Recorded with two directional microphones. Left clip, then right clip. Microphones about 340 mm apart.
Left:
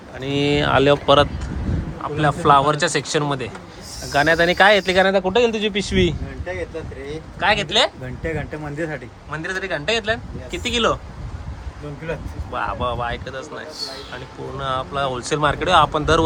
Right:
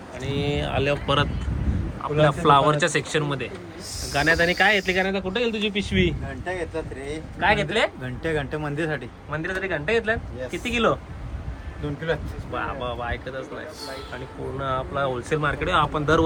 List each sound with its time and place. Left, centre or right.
0.2 s speech: left
1.0 s speech: centre
5.5 s a man's voice: left
5.8 s speech: centre
7.3 s speech: centre
12.5 s speech: centre